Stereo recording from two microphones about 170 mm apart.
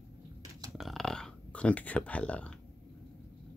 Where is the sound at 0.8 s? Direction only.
Centre (ahead or behind).